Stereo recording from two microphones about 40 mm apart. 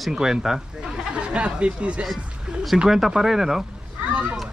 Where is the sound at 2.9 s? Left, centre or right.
Centre.